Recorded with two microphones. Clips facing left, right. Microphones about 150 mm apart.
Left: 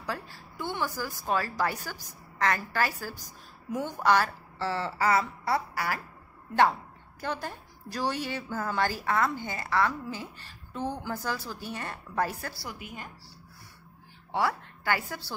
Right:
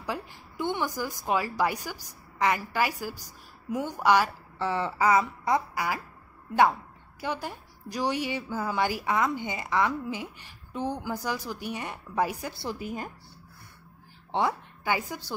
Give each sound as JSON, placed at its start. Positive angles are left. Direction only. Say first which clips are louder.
{"t": 0.0, "sound": "a woman's voice", "louder": "right 2 dB", "side_deg": -15}
{"t": 7.2, "sound": "a woman's voice", "louder": "right 1 dB", "side_deg": -10}
{"t": 12.6, "sound": "speech", "louder": "right 7 dB", "side_deg": -35}
{"t": 14.3, "sound": "a woman's voice", "louder": "right 1 dB", "side_deg": -20}